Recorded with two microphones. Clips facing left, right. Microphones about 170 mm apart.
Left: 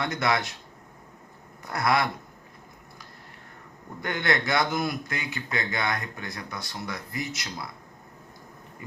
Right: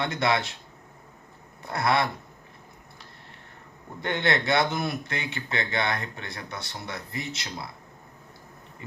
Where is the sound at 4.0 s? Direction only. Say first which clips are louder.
Right 1 dB; 25° right (ahead or behind).